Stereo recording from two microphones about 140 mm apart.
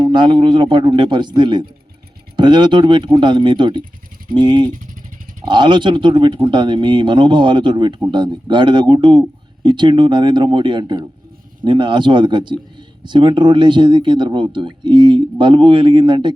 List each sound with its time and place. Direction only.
0.0 s speech: 30° right (ahead or behind)